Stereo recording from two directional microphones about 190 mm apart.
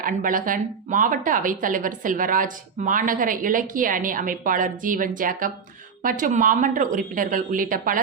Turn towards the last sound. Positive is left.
turn(degrees=-45)  # may be behind; listen again after turning